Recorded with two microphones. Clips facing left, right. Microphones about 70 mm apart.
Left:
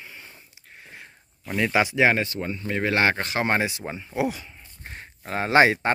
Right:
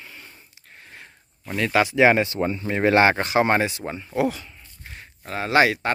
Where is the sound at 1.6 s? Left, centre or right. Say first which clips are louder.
Right 2 dB; centre.